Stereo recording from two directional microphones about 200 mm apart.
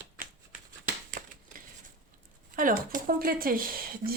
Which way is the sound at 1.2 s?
45° right (ahead or behind).